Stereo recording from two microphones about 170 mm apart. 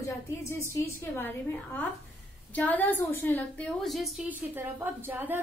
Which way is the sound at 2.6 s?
10° left (ahead or behind).